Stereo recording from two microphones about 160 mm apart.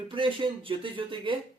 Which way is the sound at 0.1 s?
30° right (ahead or behind).